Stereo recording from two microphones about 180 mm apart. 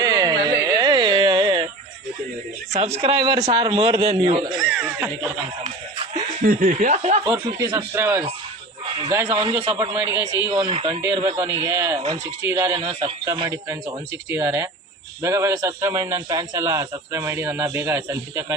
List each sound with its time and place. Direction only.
0.0 s a sound: 20° right (ahead or behind)
2.7 s speech: 35° right (ahead or behind)
4.7 s speech: 10° right (ahead or behind)
6.4 s speech: 50° right (ahead or behind)
7.6 s a man's voice: 15° right (ahead or behind)
8.9 s a sound: 30° right (ahead or behind)
9.1 s a man's voice: 20° right (ahead or behind)
10.0 s a man's voice: 10° right (ahead or behind)
10.5 s a man's voice: 30° right (ahead or behind)
11.0 s a man's voice: 20° right (ahead or behind)
13.5 s a man's voice: 15° right (ahead or behind)